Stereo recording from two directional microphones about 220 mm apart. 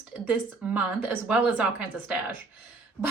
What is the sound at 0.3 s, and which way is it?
Speech, 5° right (ahead or behind).